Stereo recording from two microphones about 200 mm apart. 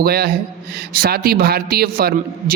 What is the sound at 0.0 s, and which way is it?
A man's voice, 50° right (ahead or behind).